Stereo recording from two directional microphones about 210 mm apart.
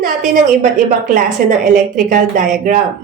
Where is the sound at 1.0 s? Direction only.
40° right (ahead or behind).